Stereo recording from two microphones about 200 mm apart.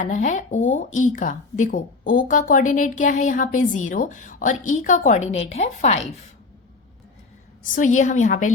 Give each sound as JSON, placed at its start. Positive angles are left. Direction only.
{"t": 0.0, "sound": "speech", "side_deg": 35}
{"t": 7.6, "sound": "speech", "side_deg": 40}